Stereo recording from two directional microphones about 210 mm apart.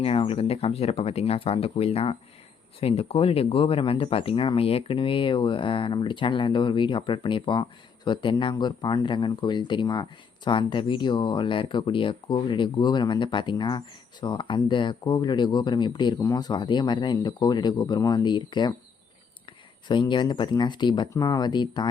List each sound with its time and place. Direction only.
0.0 s speech: 25° left (ahead or behind)
19.9 s speech: 20° left (ahead or behind)